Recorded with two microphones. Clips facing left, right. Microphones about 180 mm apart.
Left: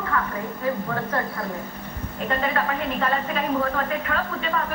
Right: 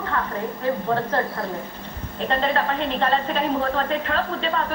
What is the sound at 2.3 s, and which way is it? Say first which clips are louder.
A woman's voice: right 2 dB; 30° right (ahead or behind).